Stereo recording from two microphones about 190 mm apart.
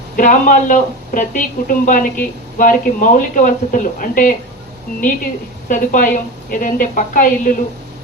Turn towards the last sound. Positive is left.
turn(degrees=45)  # may be behind; listen again after turning